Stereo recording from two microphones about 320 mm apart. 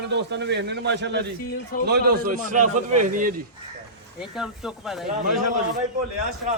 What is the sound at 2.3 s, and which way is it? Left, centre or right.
Speech, right.